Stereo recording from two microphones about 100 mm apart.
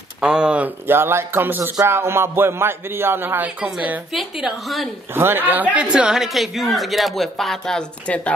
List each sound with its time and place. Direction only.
0.2 s speech: 10° right (ahead or behind)
0.8 s speech: 25° right (ahead or behind)
4.1 s speech: centre (ahead or behind)
5.1 s speech: 20° right (ahead or behind); by 8.2 s 5° left (ahead or behind)